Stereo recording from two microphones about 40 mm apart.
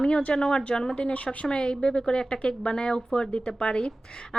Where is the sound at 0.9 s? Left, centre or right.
Left.